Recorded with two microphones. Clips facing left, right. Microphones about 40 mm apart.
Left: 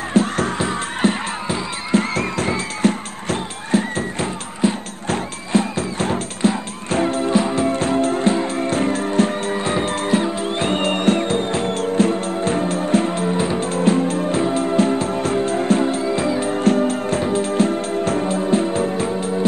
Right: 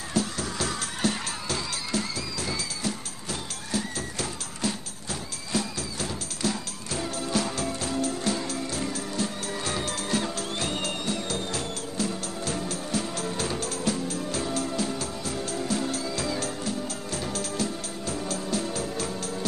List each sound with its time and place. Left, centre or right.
0.1 s music: left
0.6 s music: left
2.1 s music: left
7.7 s music: left
16.5 s music: left
16.9 s music: left
18.3 s music: left